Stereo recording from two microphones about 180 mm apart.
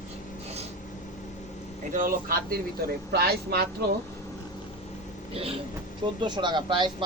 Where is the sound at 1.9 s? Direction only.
50° right (ahead or behind).